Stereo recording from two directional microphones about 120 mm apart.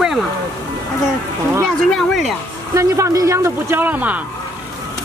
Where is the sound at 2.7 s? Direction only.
25° right (ahead or behind).